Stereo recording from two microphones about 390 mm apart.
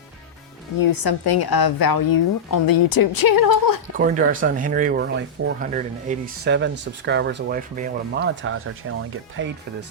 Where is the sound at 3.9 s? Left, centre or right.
Right.